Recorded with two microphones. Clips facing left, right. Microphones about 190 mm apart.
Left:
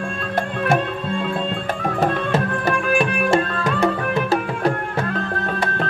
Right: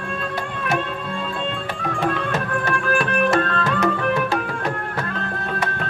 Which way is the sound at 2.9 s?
15° left (ahead or behind).